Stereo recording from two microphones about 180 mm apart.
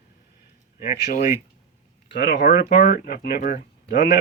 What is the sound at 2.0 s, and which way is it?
Speech, 70° left (ahead or behind).